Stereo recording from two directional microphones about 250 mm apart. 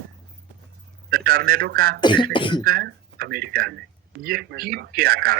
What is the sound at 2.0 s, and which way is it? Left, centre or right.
Beatboxing, centre.